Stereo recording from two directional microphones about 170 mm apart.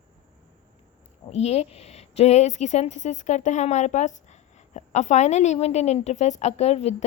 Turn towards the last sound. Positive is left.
turn(degrees=40)  # may be behind; listen again after turning